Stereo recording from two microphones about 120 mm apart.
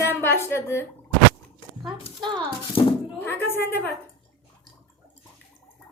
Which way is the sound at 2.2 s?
40° right (ahead or behind).